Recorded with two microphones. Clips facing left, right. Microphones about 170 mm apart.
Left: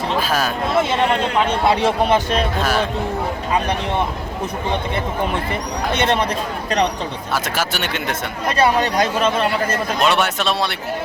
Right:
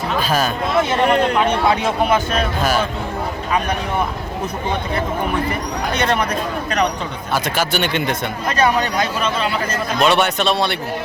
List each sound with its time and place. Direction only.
0.2 s speech: centre (ahead or behind)
1.6 s speech: 30° left (ahead or behind)
2.6 s speech: centre (ahead or behind)
5.9 s speech: 25° left (ahead or behind)
7.3 s speech: centre (ahead or behind)
8.5 s speech: 30° left (ahead or behind)
10.0 s speech: centre (ahead or behind)